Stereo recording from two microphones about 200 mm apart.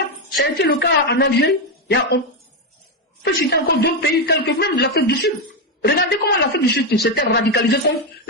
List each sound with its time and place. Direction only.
0.5 s a man's voice: 50° left (ahead or behind)
3.2 s a man's voice: 60° left (ahead or behind)